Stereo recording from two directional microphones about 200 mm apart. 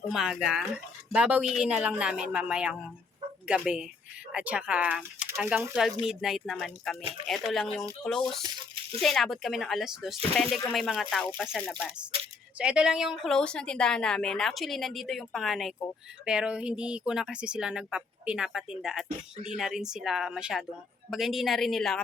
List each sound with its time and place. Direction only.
0.1 s a woman's voice: centre (ahead or behind)
8.4 s a sound: 25° right (ahead or behind)
9.0 s a woman's voice: centre (ahead or behind)
12.5 s a woman's voice: 5° right (ahead or behind)